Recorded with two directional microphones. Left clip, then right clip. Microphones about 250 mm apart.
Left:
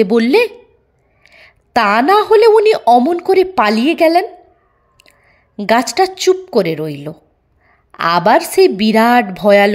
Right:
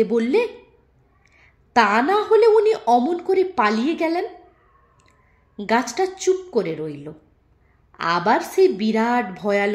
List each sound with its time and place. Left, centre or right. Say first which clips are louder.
0.0 s a woman's voice: left 8 dB; left
5.6 s a woman's voice: left 8 dB; left